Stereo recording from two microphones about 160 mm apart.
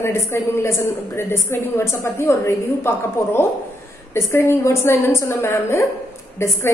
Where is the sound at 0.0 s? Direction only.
15° left (ahead or behind).